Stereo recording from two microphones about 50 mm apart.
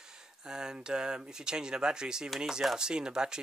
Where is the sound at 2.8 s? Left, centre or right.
Centre.